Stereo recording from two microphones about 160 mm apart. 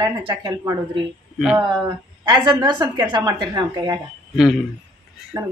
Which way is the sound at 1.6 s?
30° right (ahead or behind).